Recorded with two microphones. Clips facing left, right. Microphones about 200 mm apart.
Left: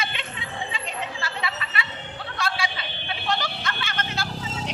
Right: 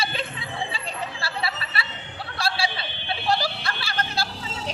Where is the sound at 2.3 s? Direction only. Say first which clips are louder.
Right 2 dB; 35° right (ahead or behind).